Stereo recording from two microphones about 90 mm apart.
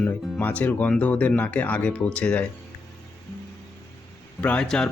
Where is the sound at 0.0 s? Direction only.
15° left (ahead or behind).